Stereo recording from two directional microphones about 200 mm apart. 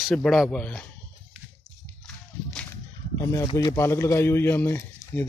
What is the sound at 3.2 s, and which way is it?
Speech, 15° left (ahead or behind).